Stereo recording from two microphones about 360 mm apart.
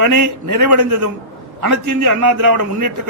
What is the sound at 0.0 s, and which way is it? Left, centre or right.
A man's voice, right.